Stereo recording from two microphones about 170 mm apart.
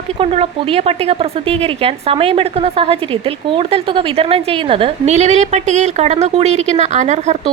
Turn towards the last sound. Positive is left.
turn(degrees=-45)  # may be behind; listen again after turning